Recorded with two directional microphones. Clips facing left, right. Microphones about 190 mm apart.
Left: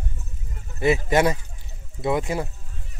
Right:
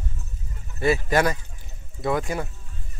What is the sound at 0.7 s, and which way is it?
Speech, 20° left (ahead or behind).